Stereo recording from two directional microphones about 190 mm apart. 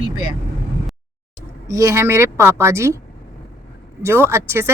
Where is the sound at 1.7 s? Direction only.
15° right (ahead or behind).